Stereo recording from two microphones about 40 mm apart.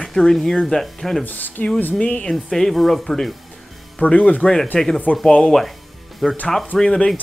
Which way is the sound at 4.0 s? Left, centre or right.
Left.